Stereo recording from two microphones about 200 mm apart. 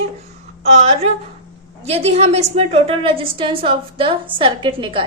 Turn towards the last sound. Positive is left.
turn(degrees=-25)  # may be behind; listen again after turning